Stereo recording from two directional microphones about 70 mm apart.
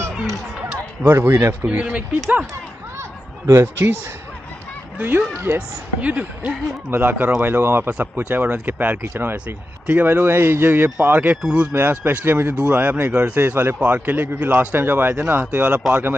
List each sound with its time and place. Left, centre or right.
1.0 s speech: right
1.7 s speech: right
3.4 s speech: right
4.9 s speech: right
6.9 s speech: right
11.4 s speech: centre
11.7 s speech: right
13.4 s speech: right